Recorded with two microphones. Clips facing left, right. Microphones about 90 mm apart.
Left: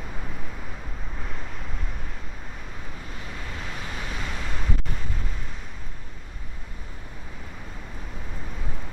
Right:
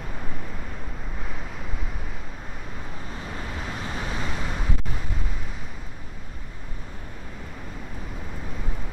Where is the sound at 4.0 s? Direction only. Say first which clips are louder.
Right 4 dB; 25° right (ahead or behind).